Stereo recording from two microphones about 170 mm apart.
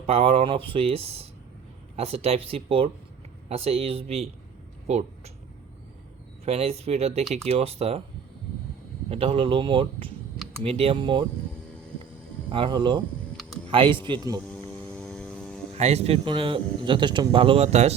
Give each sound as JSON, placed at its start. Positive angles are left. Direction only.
{"t": 0.0, "sound": "a man's voice", "side_deg": -35}
{"t": 6.4, "sound": "a man's voice", "side_deg": -35}
{"t": 9.0, "sound": "a man's voice", "side_deg": -35}
{"t": 12.5, "sound": "speech", "side_deg": -30}
{"t": 14.7, "sound": "vehicle", "side_deg": 5}
{"t": 15.7, "sound": "a man's voice", "side_deg": -40}